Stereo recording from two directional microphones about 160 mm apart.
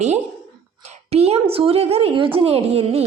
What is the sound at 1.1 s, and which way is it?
A woman's voice, 40° right (ahead or behind).